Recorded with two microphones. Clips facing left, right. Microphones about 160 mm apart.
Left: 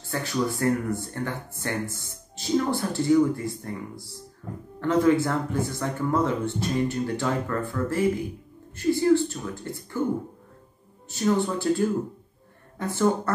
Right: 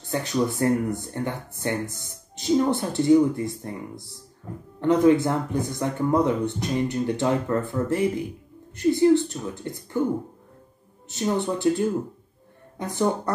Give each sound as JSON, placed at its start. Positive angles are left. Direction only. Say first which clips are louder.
{"t": 0.1, "sound": "speech", "louder": "right 2 dB", "side_deg": -20}
{"t": 11.1, "sound": "speech", "louder": "left 1 dB", "side_deg": -20}